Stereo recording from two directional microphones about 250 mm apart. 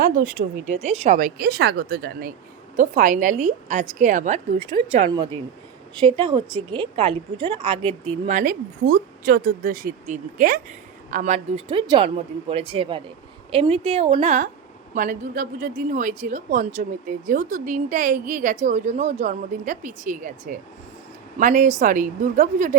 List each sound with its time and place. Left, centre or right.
0.0 s a woman's voice: right
8.3 s a woman's voice: right